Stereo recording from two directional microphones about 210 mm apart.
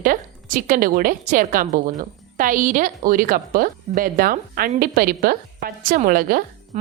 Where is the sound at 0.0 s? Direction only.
40° right (ahead or behind).